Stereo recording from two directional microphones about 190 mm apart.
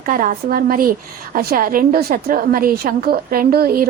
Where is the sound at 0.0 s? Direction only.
45° right (ahead or behind).